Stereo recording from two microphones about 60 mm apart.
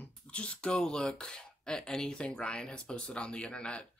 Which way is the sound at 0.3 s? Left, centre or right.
Centre.